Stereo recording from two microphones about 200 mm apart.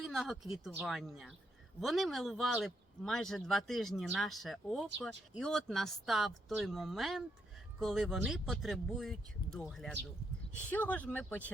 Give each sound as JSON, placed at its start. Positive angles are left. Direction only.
{"t": 0.0, "sound": "speech", "side_deg": 0}